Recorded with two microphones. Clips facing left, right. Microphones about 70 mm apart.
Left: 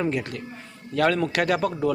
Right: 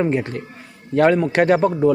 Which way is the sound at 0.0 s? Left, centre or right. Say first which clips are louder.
Right 6 dB; right.